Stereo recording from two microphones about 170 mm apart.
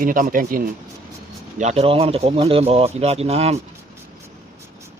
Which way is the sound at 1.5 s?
40° right (ahead or behind).